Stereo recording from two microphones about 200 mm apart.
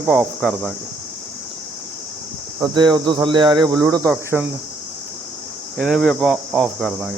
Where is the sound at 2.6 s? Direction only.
20° right (ahead or behind).